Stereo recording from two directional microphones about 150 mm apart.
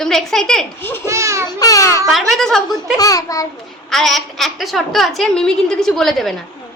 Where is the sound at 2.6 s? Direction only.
25° left (ahead or behind).